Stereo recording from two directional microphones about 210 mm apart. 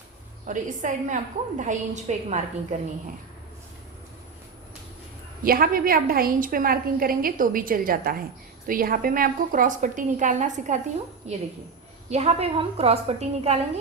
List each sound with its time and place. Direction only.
0.4 s a woman's voice: 35° right (ahead or behind)
5.4 s a woman's voice: 45° right (ahead or behind)
12.1 s a woman's voice: 30° right (ahead or behind)